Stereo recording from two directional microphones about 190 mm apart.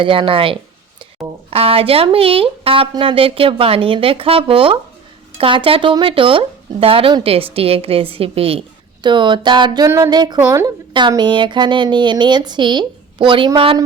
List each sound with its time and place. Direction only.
0.0 s speech: 25° right (ahead or behind)